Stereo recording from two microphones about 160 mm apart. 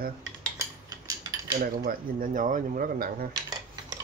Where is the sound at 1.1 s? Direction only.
25° right (ahead or behind).